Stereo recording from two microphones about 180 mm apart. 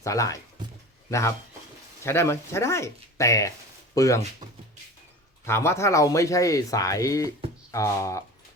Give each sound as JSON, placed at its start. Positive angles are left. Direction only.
{"t": 0.0, "sound": "speech", "side_deg": 15}
{"t": 2.0, "sound": "speech", "side_deg": 15}
{"t": 5.5, "sound": "speech", "side_deg": 15}